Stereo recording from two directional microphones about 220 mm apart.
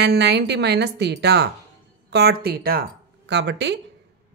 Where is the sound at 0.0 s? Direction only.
50° right (ahead or behind).